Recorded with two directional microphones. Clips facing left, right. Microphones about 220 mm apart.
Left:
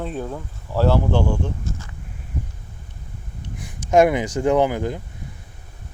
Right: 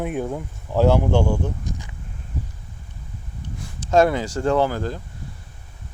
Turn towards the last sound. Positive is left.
turn(degrees=15)  # may be behind; listen again after turning